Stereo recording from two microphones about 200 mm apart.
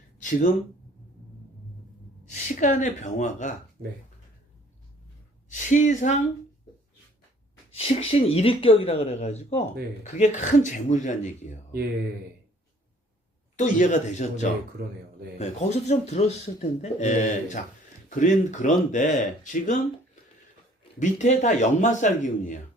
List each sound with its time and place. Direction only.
2.3 s a man's voice: 40° left (ahead or behind)
5.5 s speech: 40° left (ahead or behind)
7.7 s a man's voice: 30° left (ahead or behind)
13.6 s a man's voice: 40° left (ahead or behind)
14.8 s speech: 55° right (ahead or behind)
15.4 s a man's voice: 35° left (ahead or behind)
21.0 s a man's voice: 35° left (ahead or behind)